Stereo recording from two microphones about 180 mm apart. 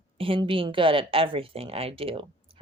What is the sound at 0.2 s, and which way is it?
Speech, 30° right (ahead or behind).